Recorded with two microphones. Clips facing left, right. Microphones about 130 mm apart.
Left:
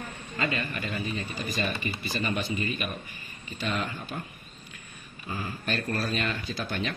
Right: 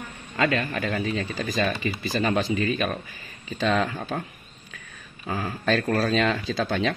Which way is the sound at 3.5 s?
90° right.